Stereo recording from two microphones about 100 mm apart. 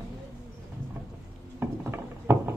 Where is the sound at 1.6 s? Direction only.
20° right (ahead or behind).